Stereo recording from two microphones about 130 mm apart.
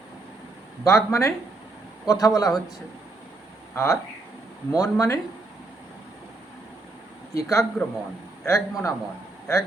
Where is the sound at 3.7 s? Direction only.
25° left (ahead or behind).